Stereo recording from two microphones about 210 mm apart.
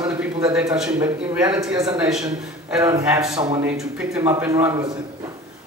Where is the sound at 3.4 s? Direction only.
20° right (ahead or behind).